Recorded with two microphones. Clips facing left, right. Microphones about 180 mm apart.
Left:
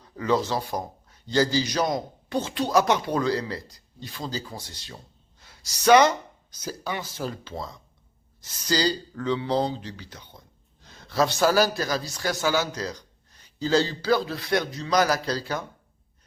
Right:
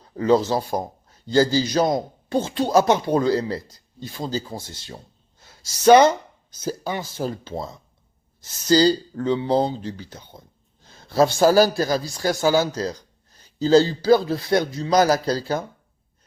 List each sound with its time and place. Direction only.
0.0 s a man's voice: 30° right (ahead or behind)